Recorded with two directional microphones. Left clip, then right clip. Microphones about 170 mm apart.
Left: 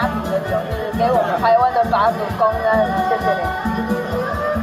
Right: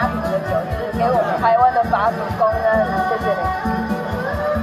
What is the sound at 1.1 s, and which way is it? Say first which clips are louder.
Speech: left 1 dB; 45° left (ahead or behind).